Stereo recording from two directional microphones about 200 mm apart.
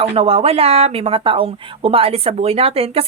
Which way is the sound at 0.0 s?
30° right (ahead or behind).